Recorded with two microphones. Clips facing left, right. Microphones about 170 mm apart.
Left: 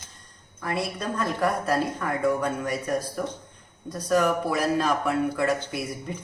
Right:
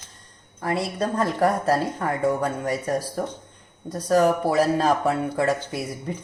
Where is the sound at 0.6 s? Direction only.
35° right (ahead or behind).